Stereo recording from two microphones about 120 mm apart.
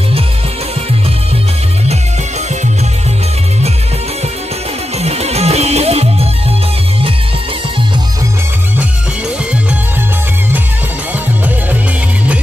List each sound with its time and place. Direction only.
4.9 s music: 60° right (ahead or behind)